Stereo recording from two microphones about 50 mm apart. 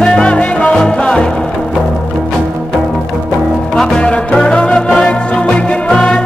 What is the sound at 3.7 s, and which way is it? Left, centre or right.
Music, centre.